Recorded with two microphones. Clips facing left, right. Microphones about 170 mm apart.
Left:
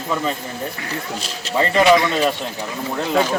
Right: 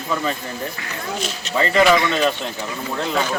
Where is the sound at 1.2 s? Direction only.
35° left (ahead or behind).